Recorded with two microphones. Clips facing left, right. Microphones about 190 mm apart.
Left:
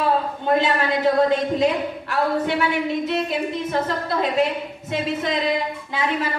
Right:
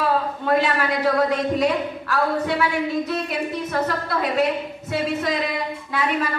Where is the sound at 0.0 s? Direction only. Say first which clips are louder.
Left 1 dB; 25° left (ahead or behind).